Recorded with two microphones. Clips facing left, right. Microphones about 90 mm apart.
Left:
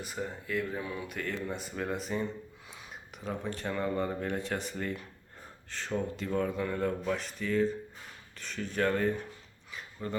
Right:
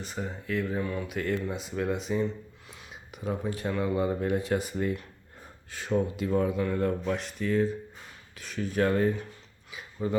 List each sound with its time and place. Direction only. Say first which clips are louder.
0.0 s speech: right 2 dB; 5° left (ahead or behind)
1.0 s speech: right 5 dB; 5° right (ahead or behind)